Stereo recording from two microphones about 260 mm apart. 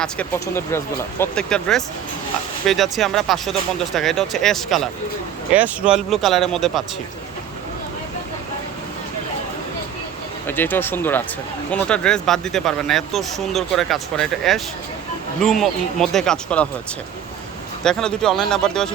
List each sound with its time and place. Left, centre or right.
0.0 s speech: centre
10.4 s speech: centre
17.8 s speech: centre